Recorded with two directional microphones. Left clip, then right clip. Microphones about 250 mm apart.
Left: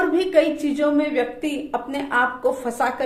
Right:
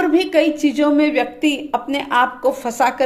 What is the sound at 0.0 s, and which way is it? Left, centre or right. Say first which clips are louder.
A woman's voice: right 3 dB; right.